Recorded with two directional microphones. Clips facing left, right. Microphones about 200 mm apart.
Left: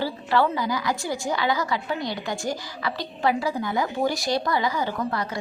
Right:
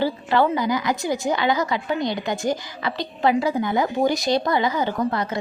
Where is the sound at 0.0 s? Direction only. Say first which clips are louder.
Right 3 dB; 20° right (ahead or behind).